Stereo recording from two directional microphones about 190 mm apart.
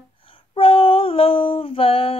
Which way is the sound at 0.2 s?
30° left (ahead or behind).